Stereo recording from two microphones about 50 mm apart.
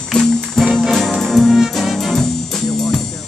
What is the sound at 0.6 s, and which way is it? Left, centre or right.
Music, centre.